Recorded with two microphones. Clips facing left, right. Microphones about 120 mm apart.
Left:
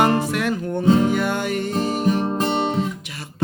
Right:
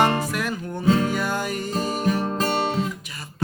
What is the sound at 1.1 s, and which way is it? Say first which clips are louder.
Music: left 4 dB; 60° left (ahead or behind).